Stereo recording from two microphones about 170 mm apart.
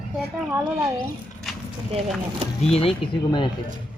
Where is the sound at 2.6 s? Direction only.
35° left (ahead or behind).